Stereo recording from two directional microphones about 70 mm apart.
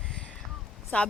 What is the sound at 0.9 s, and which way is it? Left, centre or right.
Speech, centre.